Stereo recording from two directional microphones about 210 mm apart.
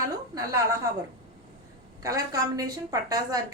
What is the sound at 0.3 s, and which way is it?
Speech, 15° right (ahead or behind).